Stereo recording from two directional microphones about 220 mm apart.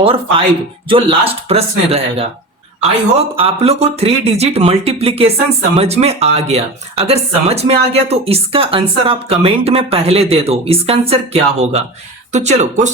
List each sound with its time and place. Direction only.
0.0 s speech: 25° right (ahead or behind)